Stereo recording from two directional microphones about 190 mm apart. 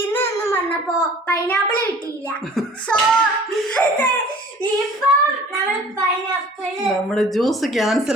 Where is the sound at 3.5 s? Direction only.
5° left (ahead or behind).